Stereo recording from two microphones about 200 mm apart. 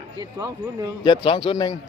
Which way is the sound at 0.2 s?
15° right (ahead or behind).